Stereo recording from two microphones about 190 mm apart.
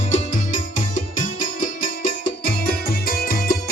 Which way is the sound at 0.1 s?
40° left (ahead or behind).